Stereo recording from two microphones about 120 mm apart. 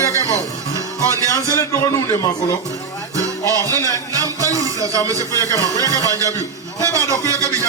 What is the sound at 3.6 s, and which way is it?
Speech, 30° right (ahead or behind).